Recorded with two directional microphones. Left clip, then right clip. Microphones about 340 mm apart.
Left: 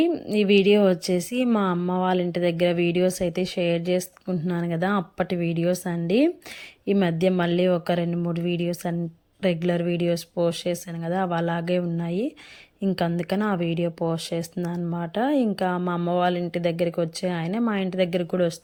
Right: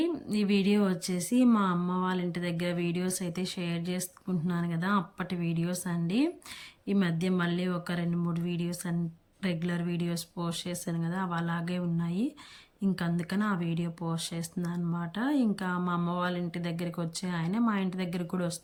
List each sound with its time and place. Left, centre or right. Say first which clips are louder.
0.0 s speech: left 9 dB; centre